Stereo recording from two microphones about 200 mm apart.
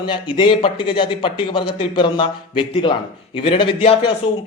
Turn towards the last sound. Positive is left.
turn(degrees=25)  # may be behind; listen again after turning